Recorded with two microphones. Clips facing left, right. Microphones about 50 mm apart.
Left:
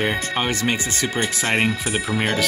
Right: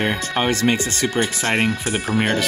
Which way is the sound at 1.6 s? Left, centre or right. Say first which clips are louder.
Right 1 dB; left.